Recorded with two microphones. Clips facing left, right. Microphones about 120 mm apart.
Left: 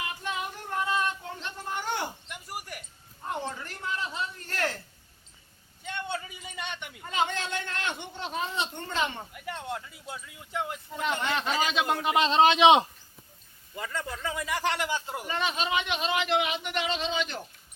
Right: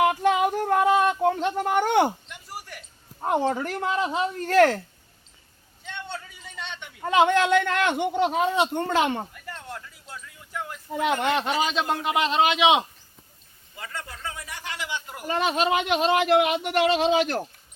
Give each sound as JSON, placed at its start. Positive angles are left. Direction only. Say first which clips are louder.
{"t": 0.0, "sound": "female singing", "louder": "right 14 dB", "side_deg": -75}
{"t": 0.6, "sound": "a sound", "louder": "right 7 dB", "side_deg": -70}
{"t": 2.3, "sound": "a sound", "louder": "even", "side_deg": 10}
{"t": 3.2, "sound": "speech", "louder": "right 11 dB", "side_deg": -80}
{"t": 6.4, "sound": "a sound", "louder": "even", "side_deg": 10}
{"t": 7.0, "sound": "speech", "louder": "right 11 dB", "side_deg": -75}
{"t": 9.3, "sound": "a sound", "louder": "left 3 dB", "side_deg": 20}
{"t": 11.0, "sound": "speech", "louder": "right 6 dB", "side_deg": -60}
{"t": 11.9, "sound": "a man's voice", "louder": "right 1 dB", "side_deg": -20}
{"t": 12.2, "sound": "a man's voice", "louder": "left 2 dB", "side_deg": 25}
{"t": 14.3, "sound": "speech", "louder": "left 8 dB", "side_deg": 90}
{"t": 14.8, "sound": "speech", "louder": "left 2 dB", "side_deg": 45}
{"t": 15.0, "sound": "a man's voice", "louder": "left 2 dB", "side_deg": 25}
{"t": 15.3, "sound": "speech", "louder": "right 7 dB", "side_deg": -50}